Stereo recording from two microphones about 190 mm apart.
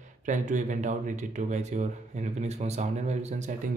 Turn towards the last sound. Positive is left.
turn(degrees=-40)  # may be behind; listen again after turning